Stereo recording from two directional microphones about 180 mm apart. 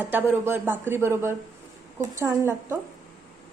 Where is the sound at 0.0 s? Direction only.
10° right (ahead or behind).